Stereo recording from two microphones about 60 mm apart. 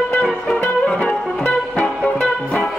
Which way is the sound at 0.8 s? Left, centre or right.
Left.